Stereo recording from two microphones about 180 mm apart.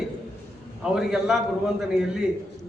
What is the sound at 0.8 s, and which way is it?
Speech, 5° right (ahead or behind).